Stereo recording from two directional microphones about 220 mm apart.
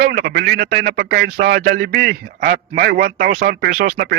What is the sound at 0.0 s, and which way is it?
Speech, 45° right (ahead or behind).